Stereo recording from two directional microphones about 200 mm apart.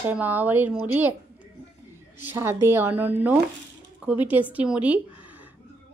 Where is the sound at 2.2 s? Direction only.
10° right (ahead or behind).